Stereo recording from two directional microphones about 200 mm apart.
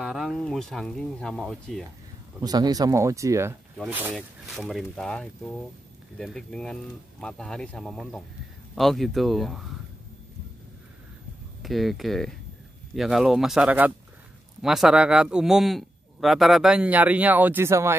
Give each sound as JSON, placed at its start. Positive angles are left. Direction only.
{"t": 0.0, "sound": "a man's voice", "side_deg": 0}
{"t": 2.4, "sound": "speech", "side_deg": -20}
{"t": 3.7, "sound": "a man's voice", "side_deg": 0}
{"t": 11.6, "sound": "a man's voice", "side_deg": 0}